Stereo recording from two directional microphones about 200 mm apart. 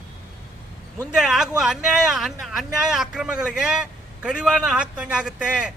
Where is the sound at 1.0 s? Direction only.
Centre (ahead or behind).